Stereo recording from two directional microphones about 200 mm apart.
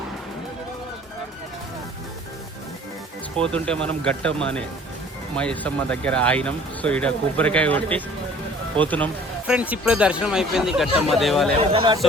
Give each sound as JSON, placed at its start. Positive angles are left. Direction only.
{"t": 3.3, "sound": "speech", "side_deg": 5}
{"t": 9.5, "sound": "speech", "side_deg": -5}
{"t": 11.7, "sound": "a man's voice", "side_deg": -25}